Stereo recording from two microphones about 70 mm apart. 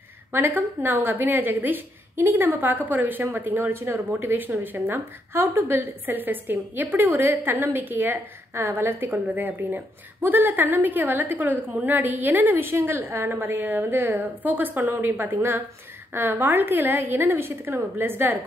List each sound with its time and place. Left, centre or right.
0.3 s a woman's voice: right